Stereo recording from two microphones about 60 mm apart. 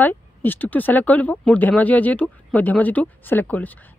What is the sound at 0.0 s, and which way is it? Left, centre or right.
Speech, left.